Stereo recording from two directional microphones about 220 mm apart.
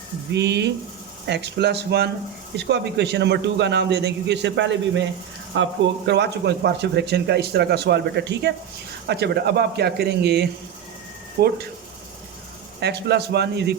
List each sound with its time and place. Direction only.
0.3 s speech: 50° right (ahead or behind)
12.8 s speech: 50° right (ahead or behind)